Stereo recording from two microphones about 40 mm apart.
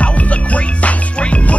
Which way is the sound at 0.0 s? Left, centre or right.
Left.